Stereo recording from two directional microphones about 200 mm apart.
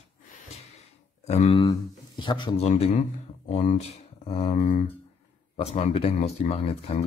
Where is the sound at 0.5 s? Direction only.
30° left (ahead or behind).